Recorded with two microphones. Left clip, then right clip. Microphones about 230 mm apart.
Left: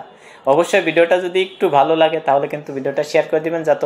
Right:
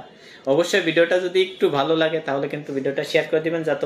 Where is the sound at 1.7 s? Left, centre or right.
Left.